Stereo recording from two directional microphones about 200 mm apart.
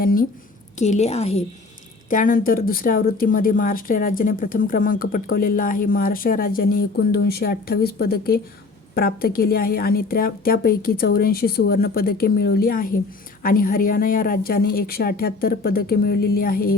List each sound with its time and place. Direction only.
0.0 s speech: 45° left (ahead or behind)
0.8 s a woman's voice: 35° left (ahead or behind)
2.0 s speech: 40° left (ahead or behind)